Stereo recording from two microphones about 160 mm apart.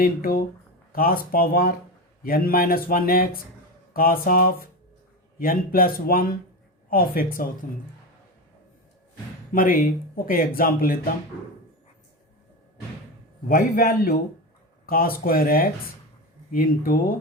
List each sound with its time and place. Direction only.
0.0 s a man's voice: 65° left (ahead or behind)
9.5 s speech: 60° left (ahead or behind)
13.5 s a man's voice: 70° left (ahead or behind)